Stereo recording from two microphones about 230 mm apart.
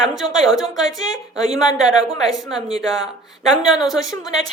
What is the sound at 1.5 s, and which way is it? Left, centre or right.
Speech, centre.